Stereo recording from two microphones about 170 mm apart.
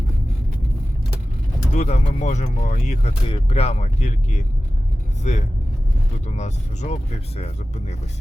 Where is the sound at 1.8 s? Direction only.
40° left (ahead or behind).